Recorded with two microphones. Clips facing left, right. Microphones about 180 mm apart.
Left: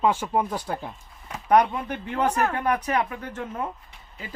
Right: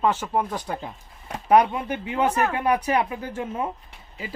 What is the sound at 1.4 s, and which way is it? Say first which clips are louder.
Speech: right 2 dB; 10° right (ahead or behind).